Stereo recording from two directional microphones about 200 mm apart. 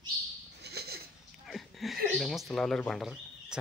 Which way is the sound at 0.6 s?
55° right (ahead or behind).